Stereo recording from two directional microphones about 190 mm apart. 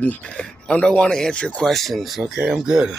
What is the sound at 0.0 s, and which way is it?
Speech, 5° left (ahead or behind).